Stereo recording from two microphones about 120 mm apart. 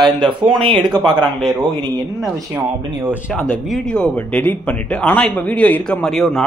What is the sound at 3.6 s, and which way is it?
Speech, 5° left (ahead or behind).